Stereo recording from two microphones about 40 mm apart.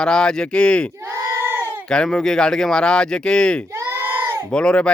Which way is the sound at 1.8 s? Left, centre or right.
Centre.